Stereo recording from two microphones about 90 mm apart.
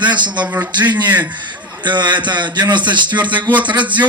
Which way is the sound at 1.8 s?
55° right (ahead or behind).